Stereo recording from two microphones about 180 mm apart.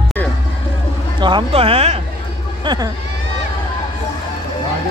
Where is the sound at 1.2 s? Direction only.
25° right (ahead or behind).